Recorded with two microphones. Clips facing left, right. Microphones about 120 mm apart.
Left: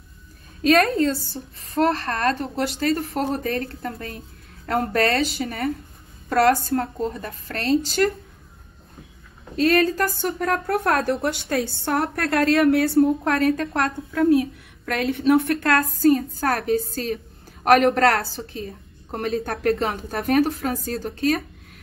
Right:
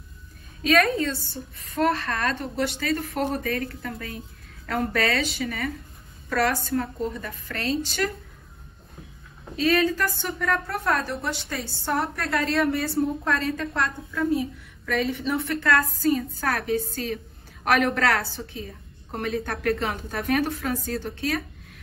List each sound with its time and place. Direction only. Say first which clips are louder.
0.7 s a woman's voice: left 4 dB; 40° left (ahead or behind)
7.2 s a woman's voice: left 2 dB; 40° left (ahead or behind)
9.6 s a woman's voice: left 3 dB; 50° left (ahead or behind)
9.8 s a woman's voice: left 3 dB; 40° left (ahead or behind)
19.1 s a woman's voice: left 3 dB; 40° left (ahead or behind)